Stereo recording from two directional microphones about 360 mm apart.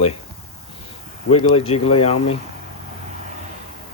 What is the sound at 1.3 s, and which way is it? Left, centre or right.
Speech, left.